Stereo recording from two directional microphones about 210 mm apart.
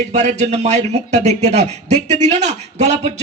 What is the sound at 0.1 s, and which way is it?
Speech, 35° right (ahead or behind).